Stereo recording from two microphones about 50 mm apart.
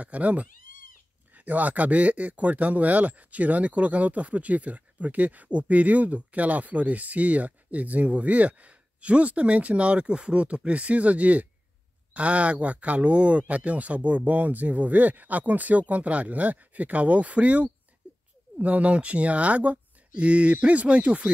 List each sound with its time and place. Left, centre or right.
0.0 s speech: right
18.0 s a sound: right
18.6 s speech: right